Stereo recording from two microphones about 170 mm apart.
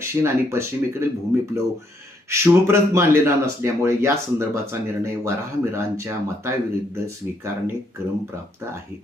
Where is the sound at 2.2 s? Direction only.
15° right (ahead or behind).